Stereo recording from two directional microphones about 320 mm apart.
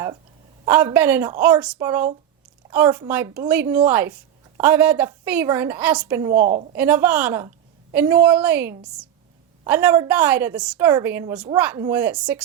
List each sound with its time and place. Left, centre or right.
0.6 s a woman's voice: centre
6.3 s a woman's voice: right
6.7 s a woman's voice: centre